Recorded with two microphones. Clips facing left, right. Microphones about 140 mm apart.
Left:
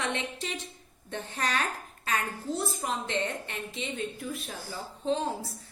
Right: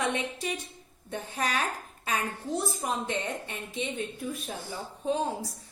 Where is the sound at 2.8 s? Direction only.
15° right (ahead or behind).